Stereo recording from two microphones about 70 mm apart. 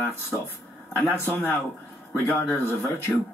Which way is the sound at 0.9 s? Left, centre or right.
Left.